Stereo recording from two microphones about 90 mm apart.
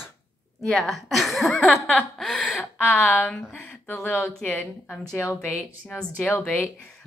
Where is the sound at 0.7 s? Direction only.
Centre (ahead or behind).